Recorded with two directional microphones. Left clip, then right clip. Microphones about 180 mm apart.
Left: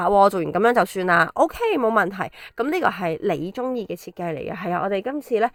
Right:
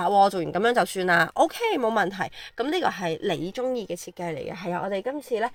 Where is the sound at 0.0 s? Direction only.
35° left (ahead or behind).